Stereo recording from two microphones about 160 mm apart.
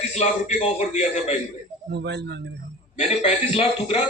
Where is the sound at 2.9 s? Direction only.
45° left (ahead or behind).